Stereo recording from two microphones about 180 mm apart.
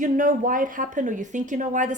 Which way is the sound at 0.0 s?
45° right (ahead or behind).